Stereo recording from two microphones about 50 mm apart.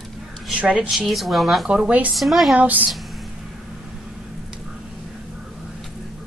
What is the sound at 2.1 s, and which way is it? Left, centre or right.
Speech, centre.